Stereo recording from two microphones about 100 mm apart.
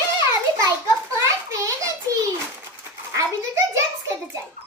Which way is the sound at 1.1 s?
30° right (ahead or behind).